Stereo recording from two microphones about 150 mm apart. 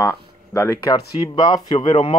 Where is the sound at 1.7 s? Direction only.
45° left (ahead or behind).